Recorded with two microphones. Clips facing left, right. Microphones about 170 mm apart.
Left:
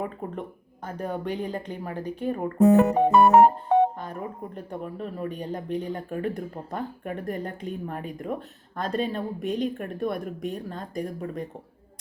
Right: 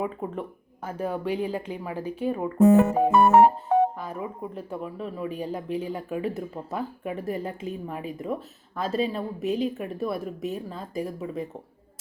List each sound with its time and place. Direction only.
0.9 s speech: 5° right (ahead or behind)